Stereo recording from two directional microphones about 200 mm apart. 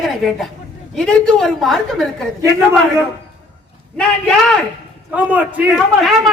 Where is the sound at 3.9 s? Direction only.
Centre (ahead or behind).